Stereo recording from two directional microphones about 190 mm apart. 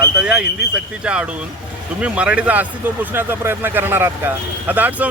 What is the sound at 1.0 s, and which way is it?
Speech, 5° right (ahead or behind).